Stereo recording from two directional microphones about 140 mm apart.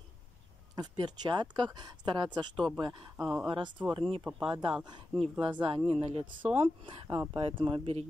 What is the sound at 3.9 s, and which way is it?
Speech, 40° right (ahead or behind).